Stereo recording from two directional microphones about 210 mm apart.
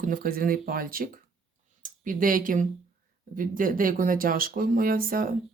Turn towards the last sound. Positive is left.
turn(degrees=-45)  # may be behind; listen again after turning